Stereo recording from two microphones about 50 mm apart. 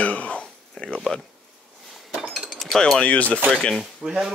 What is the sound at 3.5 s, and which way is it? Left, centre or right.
Speech, centre.